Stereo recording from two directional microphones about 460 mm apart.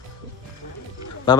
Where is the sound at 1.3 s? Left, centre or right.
Centre.